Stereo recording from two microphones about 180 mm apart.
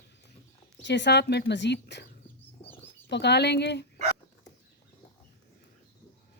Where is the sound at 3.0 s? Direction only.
70° left (ahead or behind).